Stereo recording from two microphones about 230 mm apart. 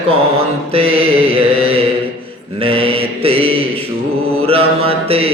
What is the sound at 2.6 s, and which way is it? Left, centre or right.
Mantra, right.